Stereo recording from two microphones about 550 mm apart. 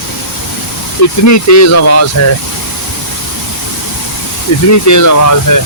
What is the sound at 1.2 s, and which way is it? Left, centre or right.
Speech, left.